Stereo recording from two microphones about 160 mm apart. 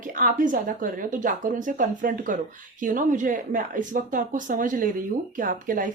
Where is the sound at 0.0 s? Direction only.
55° right (ahead or behind).